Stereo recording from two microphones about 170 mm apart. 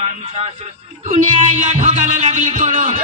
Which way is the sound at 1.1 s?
45° right (ahead or behind).